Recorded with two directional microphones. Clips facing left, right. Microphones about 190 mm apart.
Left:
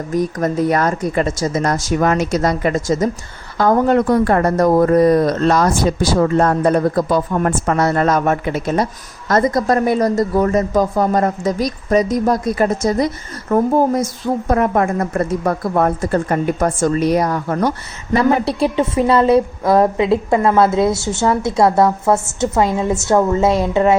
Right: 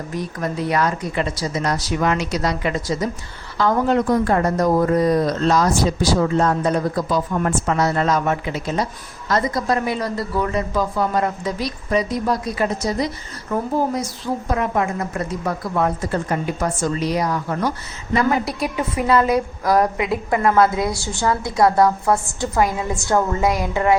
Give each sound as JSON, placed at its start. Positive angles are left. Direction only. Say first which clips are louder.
{"t": 0.1, "sound": "speech", "louder": "left 9 dB", "side_deg": 45}
{"t": 18.1, "sound": "a woman's voice", "louder": "left 5 dB", "side_deg": 30}